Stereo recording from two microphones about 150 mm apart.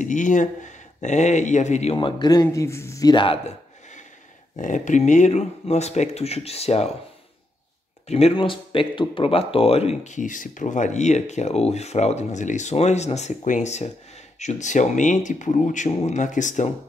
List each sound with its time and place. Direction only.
0.0 s speech: 55° left (ahead or behind)
2.0 s speech: 30° left (ahead or behind)
4.6 s speech: 55° left (ahead or behind)
8.1 s speech: 45° left (ahead or behind)